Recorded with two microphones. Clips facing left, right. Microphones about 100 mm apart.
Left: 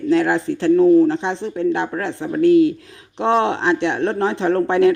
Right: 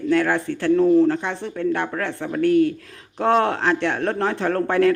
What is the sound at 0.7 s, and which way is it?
Speech, 5° left (ahead or behind).